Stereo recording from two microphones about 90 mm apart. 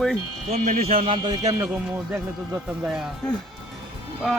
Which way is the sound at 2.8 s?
5° right (ahead or behind).